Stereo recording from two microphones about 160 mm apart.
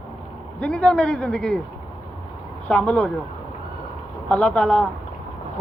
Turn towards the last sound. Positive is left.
turn(degrees=5)  # may be behind; listen again after turning